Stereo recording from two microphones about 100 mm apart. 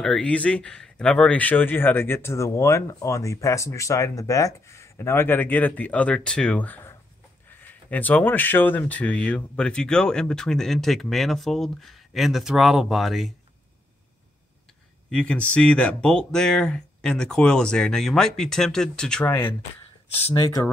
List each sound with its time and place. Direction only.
0.0 s speech: 10° left (ahead or behind)
15.0 s speech: 10° left (ahead or behind)